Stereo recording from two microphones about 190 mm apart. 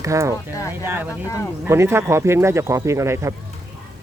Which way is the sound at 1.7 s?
15° right (ahead or behind).